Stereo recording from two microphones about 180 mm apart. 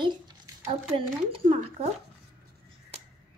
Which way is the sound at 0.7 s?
30° right (ahead or behind).